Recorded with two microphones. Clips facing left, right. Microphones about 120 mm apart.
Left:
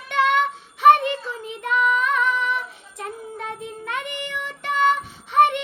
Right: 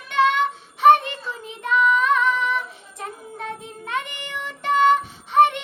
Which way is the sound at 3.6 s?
25° right (ahead or behind).